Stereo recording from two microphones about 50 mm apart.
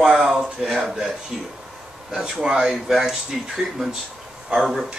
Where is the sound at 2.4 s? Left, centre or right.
Centre.